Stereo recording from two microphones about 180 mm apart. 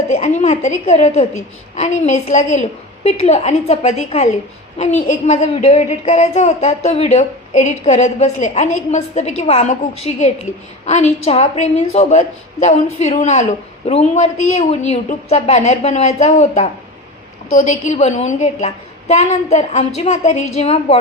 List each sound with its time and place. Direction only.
0.1 s speech: 40° left (ahead or behind)